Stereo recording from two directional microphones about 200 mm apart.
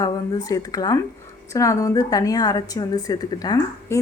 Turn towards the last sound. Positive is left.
turn(degrees=20)  # may be behind; listen again after turning